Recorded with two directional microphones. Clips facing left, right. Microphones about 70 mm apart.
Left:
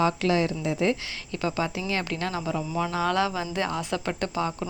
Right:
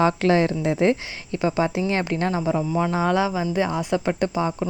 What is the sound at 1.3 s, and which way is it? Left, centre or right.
A woman's voice, right.